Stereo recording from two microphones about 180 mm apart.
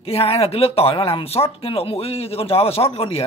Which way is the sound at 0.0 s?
35° left (ahead or behind).